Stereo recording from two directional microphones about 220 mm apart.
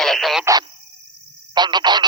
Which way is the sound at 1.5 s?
20° right (ahead or behind).